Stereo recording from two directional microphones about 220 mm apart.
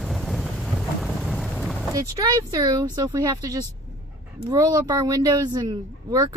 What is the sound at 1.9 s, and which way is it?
Speech, 15° right (ahead or behind).